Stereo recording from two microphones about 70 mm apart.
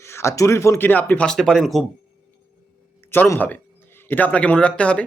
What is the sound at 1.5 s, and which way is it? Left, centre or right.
Speech, centre.